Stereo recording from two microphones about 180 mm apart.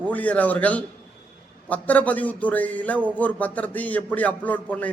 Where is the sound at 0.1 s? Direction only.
10° left (ahead or behind).